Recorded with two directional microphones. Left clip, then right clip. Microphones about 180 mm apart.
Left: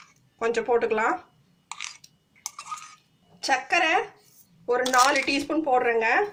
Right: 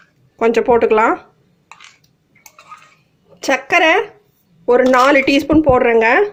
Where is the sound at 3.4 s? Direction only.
50° right (ahead or behind).